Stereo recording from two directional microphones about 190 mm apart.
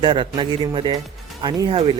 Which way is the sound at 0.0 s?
25° right (ahead or behind).